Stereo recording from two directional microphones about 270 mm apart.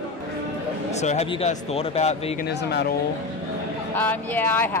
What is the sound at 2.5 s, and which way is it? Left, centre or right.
Speech, left.